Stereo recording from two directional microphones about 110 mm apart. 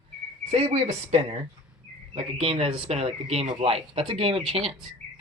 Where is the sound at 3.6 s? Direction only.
60° right (ahead or behind).